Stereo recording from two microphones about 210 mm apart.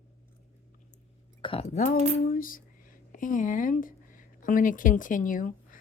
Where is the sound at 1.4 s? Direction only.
30° left (ahead or behind).